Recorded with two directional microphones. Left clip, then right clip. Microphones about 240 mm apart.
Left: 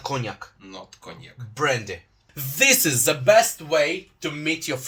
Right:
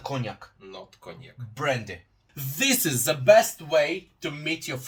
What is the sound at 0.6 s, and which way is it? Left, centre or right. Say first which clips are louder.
Speech: left 2 dB; right.